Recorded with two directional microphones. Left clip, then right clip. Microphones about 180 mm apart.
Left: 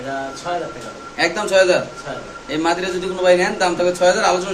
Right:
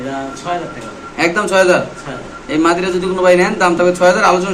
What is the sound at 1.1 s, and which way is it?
A man's voice, 5° right (ahead or behind).